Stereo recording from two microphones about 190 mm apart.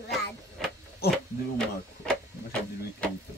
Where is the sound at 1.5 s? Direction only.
5° left (ahead or behind).